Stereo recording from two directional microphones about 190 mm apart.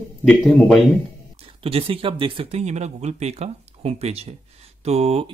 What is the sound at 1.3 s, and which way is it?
Speech, 30° right (ahead or behind).